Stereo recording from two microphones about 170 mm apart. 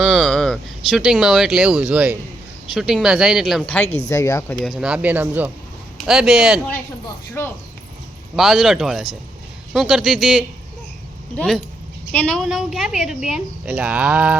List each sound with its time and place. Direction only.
0.0 s a woman's voice: centre (ahead or behind)
4.1 s speech: 15° left (ahead or behind)
4.6 s a man's voice: centre (ahead or behind)
7.4 s speech: 15° left (ahead or behind)
8.4 s a woman's voice: centre (ahead or behind)